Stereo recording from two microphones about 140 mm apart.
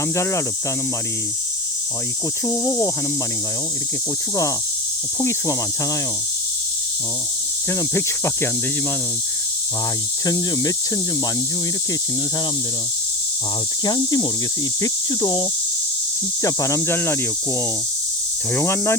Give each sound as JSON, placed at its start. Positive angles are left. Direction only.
{"t": 0.2, "sound": "speech", "side_deg": 20}
{"t": 2.5, "sound": "speech", "side_deg": 20}
{"t": 7.7, "sound": "speech", "side_deg": 20}
{"t": 10.2, "sound": "speech", "side_deg": 25}
{"t": 13.8, "sound": "speech", "side_deg": 30}
{"t": 18.5, "sound": "cricket", "side_deg": 20}